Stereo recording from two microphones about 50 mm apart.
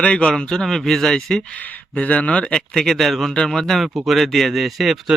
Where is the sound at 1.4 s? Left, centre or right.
Left.